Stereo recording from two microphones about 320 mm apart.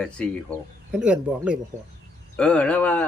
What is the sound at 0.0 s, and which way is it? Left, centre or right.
Speech, centre.